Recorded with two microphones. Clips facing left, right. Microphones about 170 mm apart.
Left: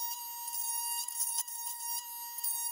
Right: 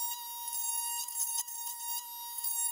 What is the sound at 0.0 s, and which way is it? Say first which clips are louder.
Alarm: even; centre (ahead or behind).